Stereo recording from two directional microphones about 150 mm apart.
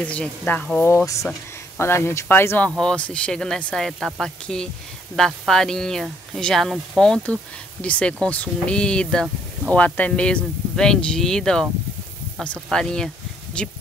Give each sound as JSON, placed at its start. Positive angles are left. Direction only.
{"t": 0.0, "sound": "speech", "side_deg": 10}